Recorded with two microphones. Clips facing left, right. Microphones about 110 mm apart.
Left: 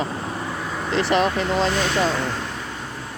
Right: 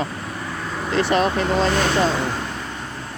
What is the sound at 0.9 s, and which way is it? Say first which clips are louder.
Speech: right 1 dB; 20° left (ahead or behind).